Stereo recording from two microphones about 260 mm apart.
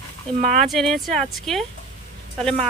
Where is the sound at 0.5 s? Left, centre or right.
Centre.